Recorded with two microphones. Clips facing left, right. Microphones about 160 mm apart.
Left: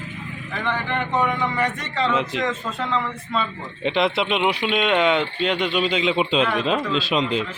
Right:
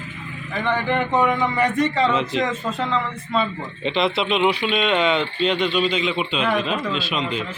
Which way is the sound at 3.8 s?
10° left (ahead or behind).